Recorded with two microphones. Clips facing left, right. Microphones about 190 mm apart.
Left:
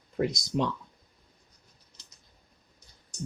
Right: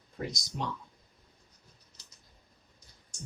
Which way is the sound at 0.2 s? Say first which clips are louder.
Left 9 dB; 75° left (ahead or behind).